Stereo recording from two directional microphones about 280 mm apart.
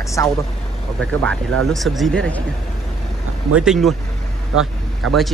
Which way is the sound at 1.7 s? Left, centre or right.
Centre.